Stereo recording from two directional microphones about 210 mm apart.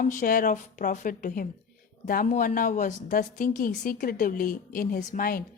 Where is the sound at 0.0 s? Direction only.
40° left (ahead or behind).